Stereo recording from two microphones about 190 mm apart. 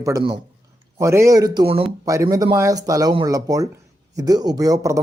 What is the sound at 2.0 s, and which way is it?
Speech, 15° right (ahead or behind).